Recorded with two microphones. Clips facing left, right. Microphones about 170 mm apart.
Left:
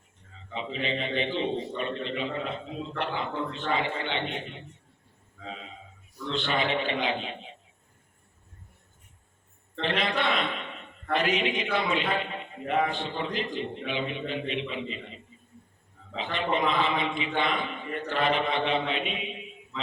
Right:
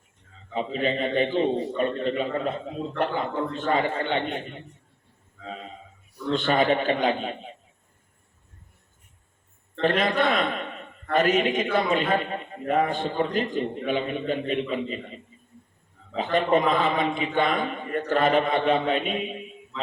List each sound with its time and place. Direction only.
0.5 s a man's voice: 45° right (ahead or behind)
6.3 s a man's voice: 45° right (ahead or behind)
9.8 s a man's voice: 45° right (ahead or behind)